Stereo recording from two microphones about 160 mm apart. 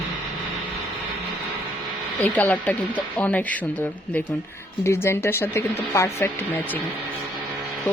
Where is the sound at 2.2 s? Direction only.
10° left (ahead or behind).